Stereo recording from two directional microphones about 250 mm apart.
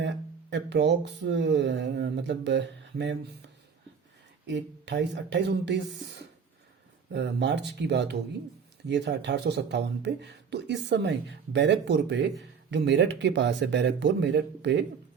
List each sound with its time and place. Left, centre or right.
0.5 s speech: right